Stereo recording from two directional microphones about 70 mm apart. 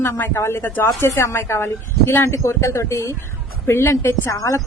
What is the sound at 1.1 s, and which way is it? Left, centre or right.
Speech, left.